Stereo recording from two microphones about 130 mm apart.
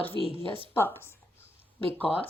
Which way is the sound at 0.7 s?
20° left (ahead or behind).